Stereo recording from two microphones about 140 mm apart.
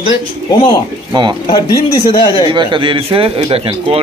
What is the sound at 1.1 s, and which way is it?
Speech, 30° right (ahead or behind).